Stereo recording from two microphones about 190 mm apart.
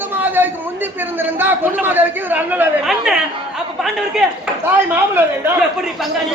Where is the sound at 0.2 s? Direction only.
10° right (ahead or behind).